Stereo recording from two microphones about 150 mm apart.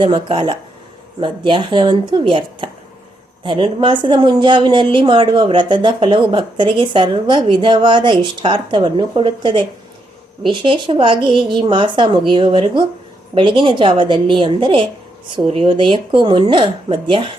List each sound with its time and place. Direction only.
0.0 s a woman's voice: 35° right (ahead or behind)